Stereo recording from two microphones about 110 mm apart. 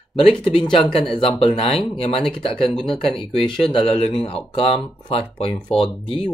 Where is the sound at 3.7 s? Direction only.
55° left (ahead or behind).